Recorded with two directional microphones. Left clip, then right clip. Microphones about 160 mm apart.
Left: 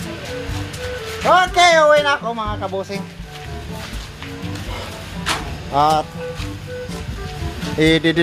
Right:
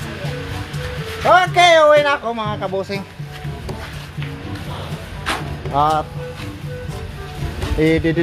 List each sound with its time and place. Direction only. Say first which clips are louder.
1.2 s speech: right 1 dB; 5° left (ahead or behind)
5.7 s speech: left 1 dB; 25° left (ahead or behind)
7.8 s speech: left 1 dB; 30° left (ahead or behind)